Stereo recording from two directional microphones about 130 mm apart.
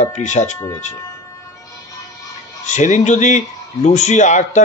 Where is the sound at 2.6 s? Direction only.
65° left (ahead or behind).